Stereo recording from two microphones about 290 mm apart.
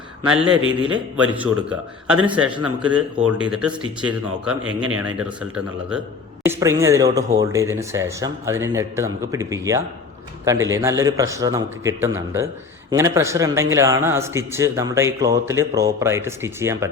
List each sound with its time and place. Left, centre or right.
0.3 s speech: centre
0.6 s a man's voice: right
0.9 s speech: centre
6.4 s a man's voice: centre